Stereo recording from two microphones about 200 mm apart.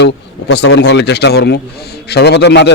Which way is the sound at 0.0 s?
60° left (ahead or behind).